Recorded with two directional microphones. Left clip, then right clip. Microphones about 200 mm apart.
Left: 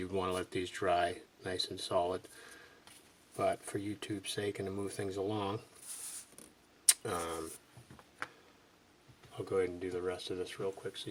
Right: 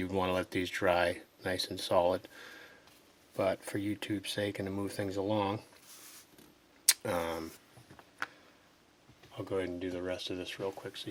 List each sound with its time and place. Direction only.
0.0 s speech: 40° right (ahead or behind)
3.3 s speech: 40° right (ahead or behind)
6.8 s a sound: 40° right (ahead or behind)
9.5 s speech: 40° right (ahead or behind)